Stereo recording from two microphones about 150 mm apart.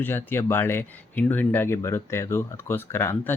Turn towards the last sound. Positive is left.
turn(degrees=15)  # may be behind; listen again after turning